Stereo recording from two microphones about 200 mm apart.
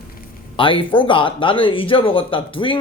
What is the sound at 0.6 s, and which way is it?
Speech, 25° left (ahead or behind).